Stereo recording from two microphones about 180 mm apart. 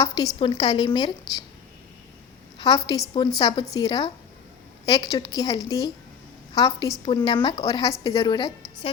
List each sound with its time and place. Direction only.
0.3 s a woman's voice: 30° left (ahead or behind)
2.6 s a woman's voice: 25° left (ahead or behind)